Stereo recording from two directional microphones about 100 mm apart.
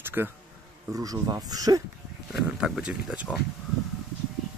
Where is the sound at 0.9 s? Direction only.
35° right (ahead or behind).